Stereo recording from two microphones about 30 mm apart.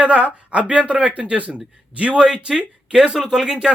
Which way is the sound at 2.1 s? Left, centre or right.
Right.